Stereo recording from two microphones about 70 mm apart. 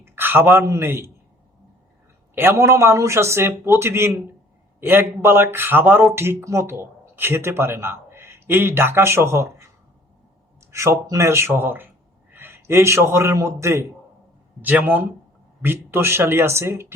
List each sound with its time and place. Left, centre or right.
0.0 s a sound: right
0.8 s a man's voice: right
2.3 s a man's voice: right
10.7 s speech: right
11.3 s a man's voice: right
14.6 s a man's voice: right